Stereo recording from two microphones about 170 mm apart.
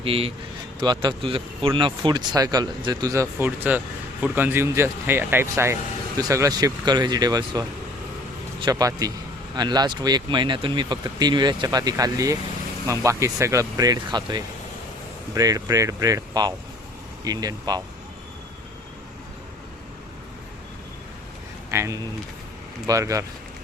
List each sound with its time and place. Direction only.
0.0 s a man's voice: 35° right (ahead or behind)
8.6 s speech: 20° right (ahead or behind)
21.7 s speech: 15° right (ahead or behind)